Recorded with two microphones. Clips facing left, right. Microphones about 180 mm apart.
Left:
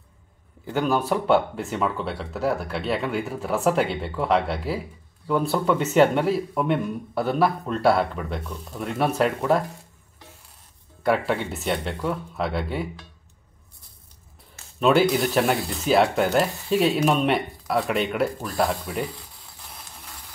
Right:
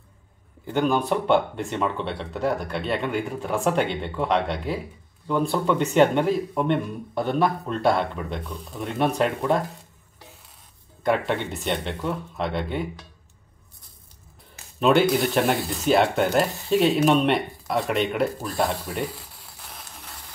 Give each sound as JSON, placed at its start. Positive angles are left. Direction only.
{"t": 0.7, "sound": "speech", "side_deg": 5}
{"t": 11.0, "sound": "speech", "side_deg": 5}
{"t": 14.8, "sound": "speech", "side_deg": 0}